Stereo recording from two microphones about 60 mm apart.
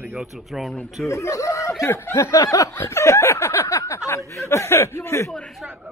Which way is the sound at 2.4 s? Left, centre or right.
Left.